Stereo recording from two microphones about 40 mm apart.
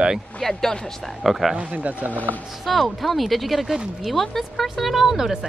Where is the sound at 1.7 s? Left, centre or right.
Right.